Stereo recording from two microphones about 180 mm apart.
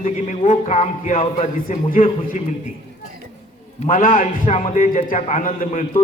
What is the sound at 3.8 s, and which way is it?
A man's voice, 50° left (ahead or behind).